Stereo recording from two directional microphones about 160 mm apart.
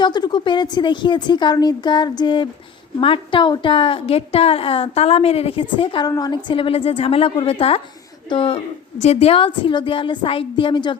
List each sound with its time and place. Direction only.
0.0 s a woman's voice: 25° left (ahead or behind)